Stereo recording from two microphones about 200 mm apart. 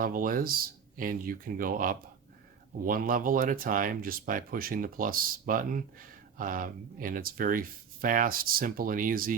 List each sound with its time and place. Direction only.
0.0 s speech: 45° right (ahead or behind)